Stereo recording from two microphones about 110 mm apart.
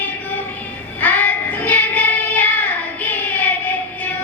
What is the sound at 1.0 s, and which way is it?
Child singing, 15° left (ahead or behind).